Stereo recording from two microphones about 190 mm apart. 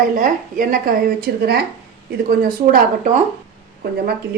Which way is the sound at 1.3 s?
55° right (ahead or behind).